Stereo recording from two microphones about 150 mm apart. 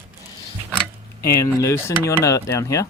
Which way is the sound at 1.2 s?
20° left (ahead or behind).